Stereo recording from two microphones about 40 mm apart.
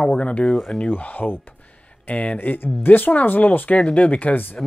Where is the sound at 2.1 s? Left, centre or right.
Left.